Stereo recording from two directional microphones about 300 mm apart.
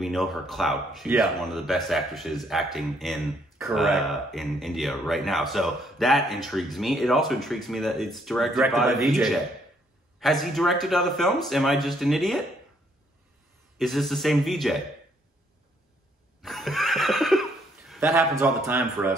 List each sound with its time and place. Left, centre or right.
0.0 s speech: centre
13.7 s speech: centre
16.3 s neigh: centre